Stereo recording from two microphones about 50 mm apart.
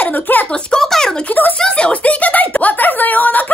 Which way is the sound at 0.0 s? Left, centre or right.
Left.